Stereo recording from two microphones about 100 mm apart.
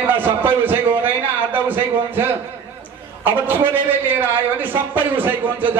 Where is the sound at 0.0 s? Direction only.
20° right (ahead or behind).